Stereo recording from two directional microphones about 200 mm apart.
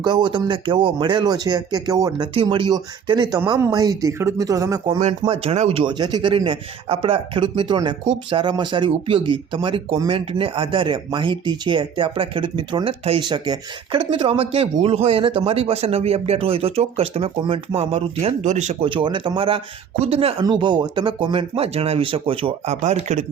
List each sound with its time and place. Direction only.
0.0 s a man's voice: 20° right (ahead or behind)
5.3 s a man's voice: 30° right (ahead or behind)